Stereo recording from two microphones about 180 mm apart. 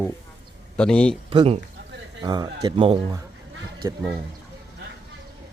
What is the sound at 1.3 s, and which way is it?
Speech, 30° right (ahead or behind).